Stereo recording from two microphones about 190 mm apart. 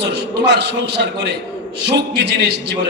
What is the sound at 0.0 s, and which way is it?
A man's voice, 60° right (ahead or behind).